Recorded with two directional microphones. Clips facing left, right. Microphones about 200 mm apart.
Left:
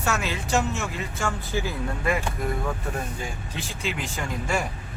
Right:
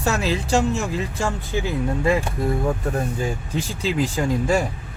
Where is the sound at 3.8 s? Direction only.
35° right (ahead or behind).